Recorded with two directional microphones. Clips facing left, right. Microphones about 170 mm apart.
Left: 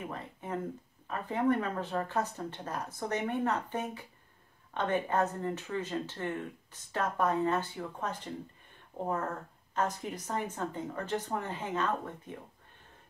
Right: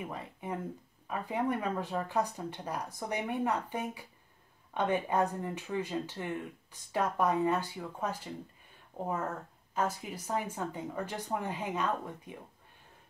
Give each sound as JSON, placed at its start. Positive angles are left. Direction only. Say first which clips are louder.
{"t": 0.1, "sound": "a sound", "louder": "even", "side_deg": -10}
{"t": 1.0, "sound": "speech", "louder": "left 3 dB", "side_deg": -10}
{"t": 9.8, "sound": "speech", "louder": "left 1 dB", "side_deg": -10}